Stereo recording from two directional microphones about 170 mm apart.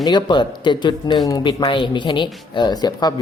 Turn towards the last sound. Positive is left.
turn(degrees=25)  # may be behind; listen again after turning